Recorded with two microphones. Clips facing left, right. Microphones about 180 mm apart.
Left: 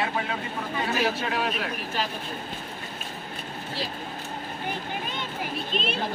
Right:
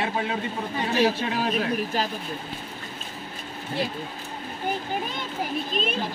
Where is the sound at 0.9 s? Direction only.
35° right (ahead or behind).